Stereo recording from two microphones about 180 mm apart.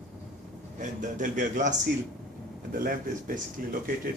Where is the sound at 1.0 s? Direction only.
45° right (ahead or behind).